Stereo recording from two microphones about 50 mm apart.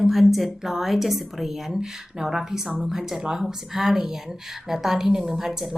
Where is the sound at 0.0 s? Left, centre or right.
Centre.